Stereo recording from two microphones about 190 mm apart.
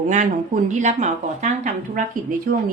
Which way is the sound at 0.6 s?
40° right (ahead or behind).